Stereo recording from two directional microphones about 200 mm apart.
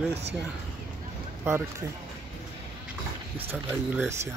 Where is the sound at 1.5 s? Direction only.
10° right (ahead or behind).